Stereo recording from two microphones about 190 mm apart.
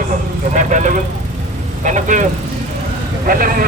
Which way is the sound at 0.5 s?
40° right (ahead or behind).